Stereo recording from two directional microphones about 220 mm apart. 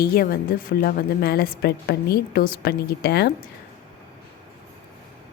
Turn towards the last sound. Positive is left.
turn(degrees=45)  # may be behind; listen again after turning